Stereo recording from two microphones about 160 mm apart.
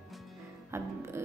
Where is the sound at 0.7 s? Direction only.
20° right (ahead or behind).